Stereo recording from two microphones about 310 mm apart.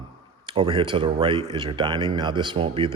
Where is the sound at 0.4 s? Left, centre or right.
Centre.